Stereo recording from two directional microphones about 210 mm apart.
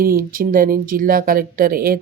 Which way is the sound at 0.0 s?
40° right (ahead or behind).